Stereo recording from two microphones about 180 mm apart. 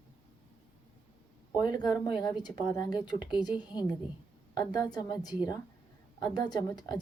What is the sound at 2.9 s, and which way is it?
A woman's voice, 20° left (ahead or behind).